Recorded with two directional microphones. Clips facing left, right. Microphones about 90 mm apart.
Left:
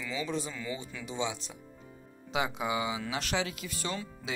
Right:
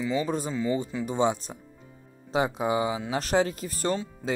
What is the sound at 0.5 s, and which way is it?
Speech, 30° right (ahead or behind).